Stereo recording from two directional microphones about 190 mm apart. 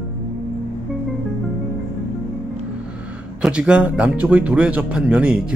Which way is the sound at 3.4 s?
5° right (ahead or behind).